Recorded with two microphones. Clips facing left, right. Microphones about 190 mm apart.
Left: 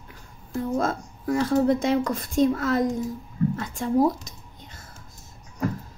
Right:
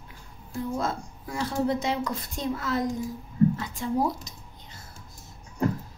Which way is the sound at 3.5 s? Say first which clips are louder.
Left 3 dB; 50° left (ahead or behind).